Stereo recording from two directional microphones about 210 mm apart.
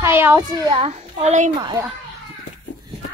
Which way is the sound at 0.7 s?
30° right (ahead or behind).